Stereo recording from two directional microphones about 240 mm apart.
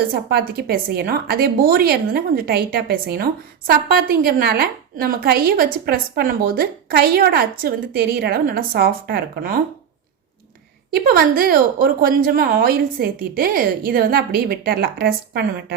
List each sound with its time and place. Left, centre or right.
0.1 s a woman's voice: right
10.9 s a woman's voice: right